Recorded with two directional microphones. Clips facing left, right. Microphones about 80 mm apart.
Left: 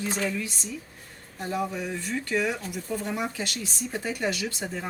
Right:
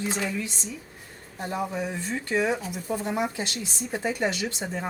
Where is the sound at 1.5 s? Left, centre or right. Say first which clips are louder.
Even; right.